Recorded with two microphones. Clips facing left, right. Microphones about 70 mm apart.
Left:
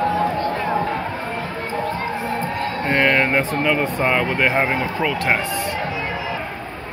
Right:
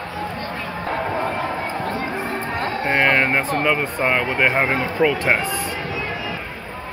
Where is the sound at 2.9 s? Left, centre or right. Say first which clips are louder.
Even; centre.